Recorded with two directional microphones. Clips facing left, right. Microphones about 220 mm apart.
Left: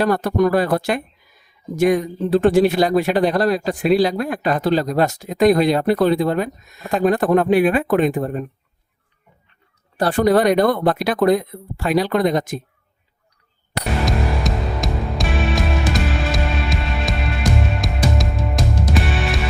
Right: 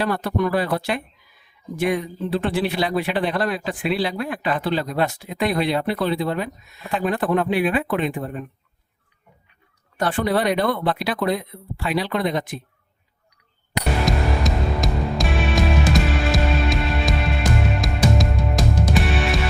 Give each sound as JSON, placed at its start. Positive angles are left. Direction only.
{"t": 0.0, "sound": "speech", "side_deg": 45}
{"t": 10.0, "sound": "speech", "side_deg": 40}
{"t": 14.0, "sound": "music", "side_deg": 0}